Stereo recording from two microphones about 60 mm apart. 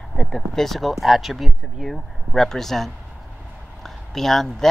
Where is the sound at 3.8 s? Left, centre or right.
Centre.